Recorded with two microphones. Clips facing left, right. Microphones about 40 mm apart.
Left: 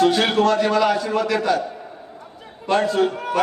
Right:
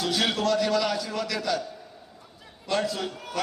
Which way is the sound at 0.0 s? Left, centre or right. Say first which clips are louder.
Left 9 dB; left.